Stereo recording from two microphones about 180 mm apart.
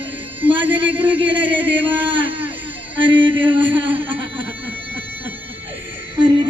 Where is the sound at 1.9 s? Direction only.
10° right (ahead or behind).